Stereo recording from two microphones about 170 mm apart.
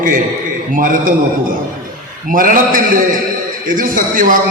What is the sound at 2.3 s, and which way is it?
A man's voice, 55° right (ahead or behind).